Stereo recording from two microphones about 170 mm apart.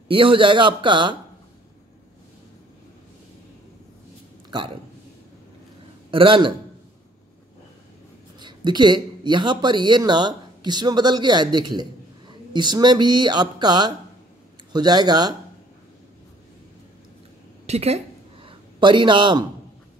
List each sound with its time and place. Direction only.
0.1 s speech: 30° right (ahead or behind)
4.5 s speech: 30° right (ahead or behind)
6.0 s a man's voice: 30° right (ahead or behind)
8.4 s speech: 25° right (ahead or behind)
17.6 s a sound: 40° right (ahead or behind)